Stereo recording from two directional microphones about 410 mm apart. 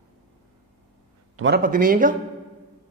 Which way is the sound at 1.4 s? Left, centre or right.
Right.